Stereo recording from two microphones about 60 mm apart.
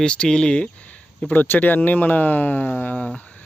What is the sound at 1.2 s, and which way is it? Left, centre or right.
Speech, left.